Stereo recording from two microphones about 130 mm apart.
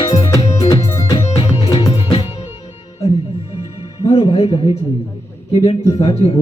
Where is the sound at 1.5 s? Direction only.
30° left (ahead or behind).